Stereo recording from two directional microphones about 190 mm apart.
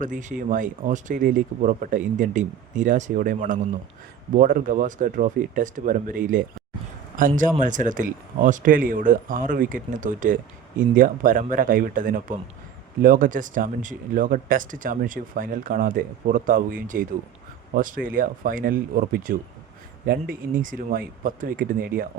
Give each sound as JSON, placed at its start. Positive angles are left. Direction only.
{"t": 0.0, "sound": "speech", "side_deg": -40}